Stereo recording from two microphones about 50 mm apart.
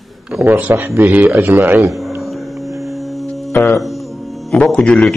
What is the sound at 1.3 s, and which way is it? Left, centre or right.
Speech, right.